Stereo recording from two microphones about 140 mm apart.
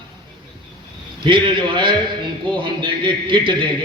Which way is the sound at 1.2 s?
35° right (ahead or behind).